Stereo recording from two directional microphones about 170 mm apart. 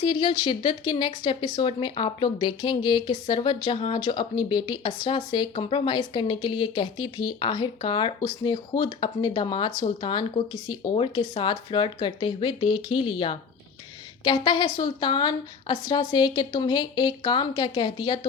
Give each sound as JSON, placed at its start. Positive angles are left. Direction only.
{"t": 0.0, "sound": "speech", "side_deg": 30}